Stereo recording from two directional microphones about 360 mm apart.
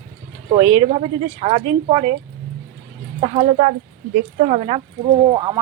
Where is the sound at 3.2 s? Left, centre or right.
Centre.